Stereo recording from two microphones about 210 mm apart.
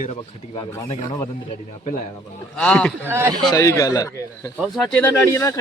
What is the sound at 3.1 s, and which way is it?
Speech, 10° right (ahead or behind).